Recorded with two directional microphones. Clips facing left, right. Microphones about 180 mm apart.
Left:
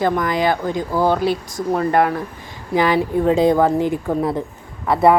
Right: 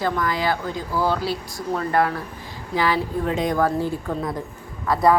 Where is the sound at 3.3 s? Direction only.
30° left (ahead or behind).